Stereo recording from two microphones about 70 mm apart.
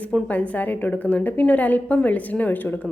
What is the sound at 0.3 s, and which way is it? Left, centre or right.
A woman's voice, left.